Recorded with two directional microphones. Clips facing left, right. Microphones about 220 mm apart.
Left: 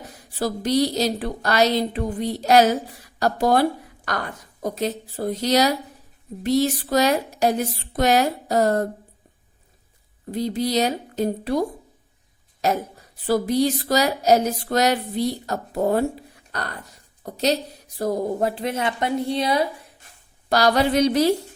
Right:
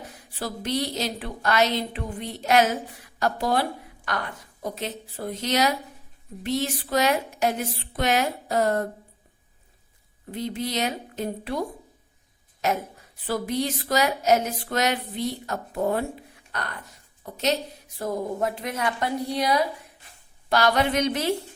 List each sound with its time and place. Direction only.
0.3 s a woman's voice: 40° left (ahead or behind)
10.3 s speech: 35° left (ahead or behind)
12.6 s a woman's voice: 35° left (ahead or behind)